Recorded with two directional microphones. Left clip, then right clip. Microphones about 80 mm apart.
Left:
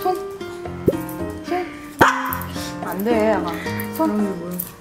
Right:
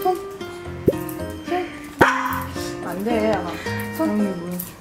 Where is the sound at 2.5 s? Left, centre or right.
Left.